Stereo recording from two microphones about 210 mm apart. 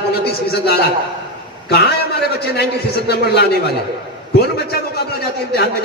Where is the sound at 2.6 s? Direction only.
50° left (ahead or behind).